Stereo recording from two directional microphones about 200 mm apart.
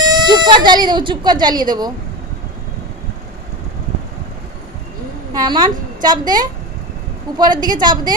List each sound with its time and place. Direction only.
0.0 s speech: 20° right (ahead or behind)
5.3 s speech: 20° right (ahead or behind)